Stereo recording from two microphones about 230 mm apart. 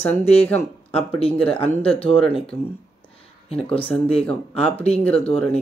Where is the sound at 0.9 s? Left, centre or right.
Left.